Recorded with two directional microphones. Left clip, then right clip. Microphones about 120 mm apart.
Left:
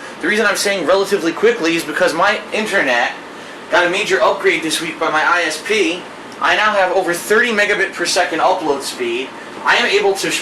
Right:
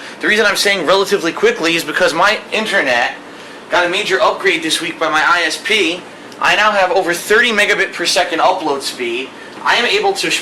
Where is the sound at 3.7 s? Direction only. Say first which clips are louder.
Even; 10° right (ahead or behind).